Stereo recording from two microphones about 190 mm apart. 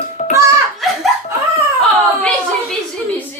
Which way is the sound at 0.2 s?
35° left (ahead or behind).